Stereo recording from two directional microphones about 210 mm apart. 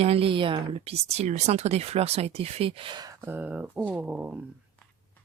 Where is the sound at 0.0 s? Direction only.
25° right (ahead or behind); by 4.4 s 5° right (ahead or behind).